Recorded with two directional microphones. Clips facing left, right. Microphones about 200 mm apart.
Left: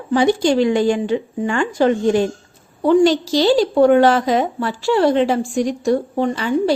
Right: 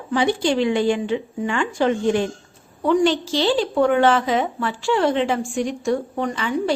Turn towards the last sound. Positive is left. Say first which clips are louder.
# left 5 dB
turn(degrees=35)  # may be behind; listen again after turning